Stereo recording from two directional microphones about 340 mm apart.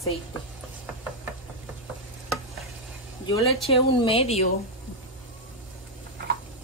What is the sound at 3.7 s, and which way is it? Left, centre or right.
Speech, centre.